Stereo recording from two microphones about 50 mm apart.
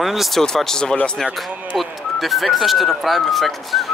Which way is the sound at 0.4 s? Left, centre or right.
Centre.